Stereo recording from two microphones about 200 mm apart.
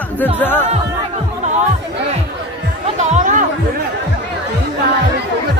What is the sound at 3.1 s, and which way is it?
Chatter, 40° right (ahead or behind).